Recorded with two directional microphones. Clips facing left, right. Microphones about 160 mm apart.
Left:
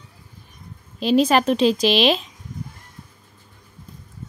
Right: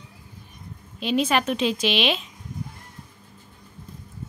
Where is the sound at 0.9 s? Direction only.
35° left (ahead or behind).